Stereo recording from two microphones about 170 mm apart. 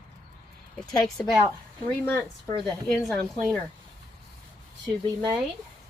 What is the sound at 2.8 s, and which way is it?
Speech, 5° left (ahead or behind).